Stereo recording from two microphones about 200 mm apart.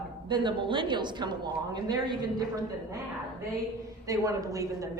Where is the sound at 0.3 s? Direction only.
25° right (ahead or behind).